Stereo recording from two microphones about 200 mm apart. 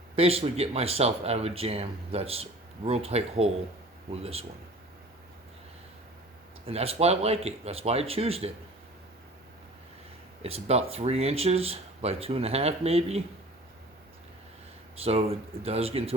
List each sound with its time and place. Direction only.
0.2 s speech: 30° right (ahead or behind)
6.7 s speech: 30° right (ahead or behind)
10.4 s speech: 30° right (ahead or behind)
15.0 s speech: 30° right (ahead or behind)